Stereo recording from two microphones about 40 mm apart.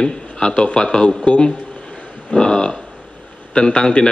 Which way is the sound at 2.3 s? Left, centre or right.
Centre.